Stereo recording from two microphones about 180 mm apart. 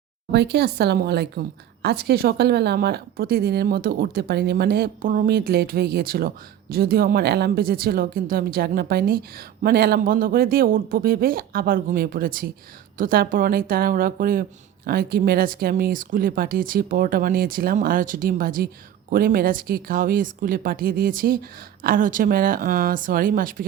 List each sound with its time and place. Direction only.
0.3 s speech: 70° right (ahead or behind); by 23.6 s 50° right (ahead or behind)